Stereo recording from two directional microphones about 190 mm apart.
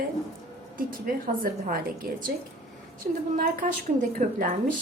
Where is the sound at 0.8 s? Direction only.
50° right (ahead or behind).